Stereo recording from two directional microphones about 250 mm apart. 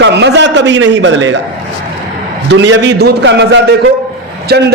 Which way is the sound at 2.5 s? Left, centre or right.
Right.